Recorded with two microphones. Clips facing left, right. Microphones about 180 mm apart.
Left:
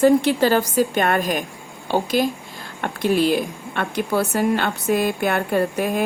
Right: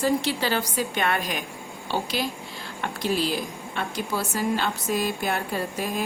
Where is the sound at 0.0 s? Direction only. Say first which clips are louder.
Left 9 dB; 50° left (ahead or behind).